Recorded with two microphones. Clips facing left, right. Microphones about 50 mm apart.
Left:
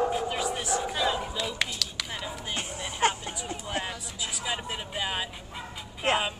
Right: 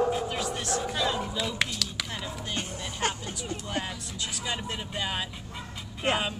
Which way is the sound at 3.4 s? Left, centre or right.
Centre.